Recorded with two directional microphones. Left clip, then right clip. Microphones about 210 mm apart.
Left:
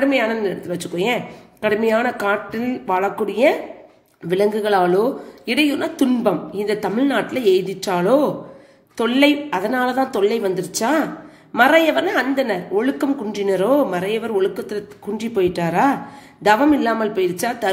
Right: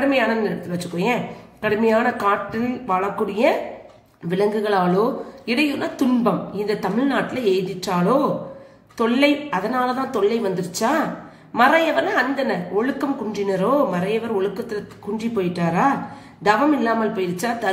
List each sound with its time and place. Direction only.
0.7 s a woman's voice: 45° left (ahead or behind)